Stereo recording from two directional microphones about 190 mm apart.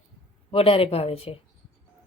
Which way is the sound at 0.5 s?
30° left (ahead or behind).